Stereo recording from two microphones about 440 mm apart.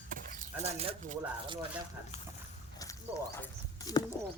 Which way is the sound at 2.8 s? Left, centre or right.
Centre.